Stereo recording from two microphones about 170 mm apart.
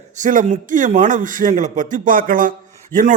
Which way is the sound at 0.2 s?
50° right (ahead or behind).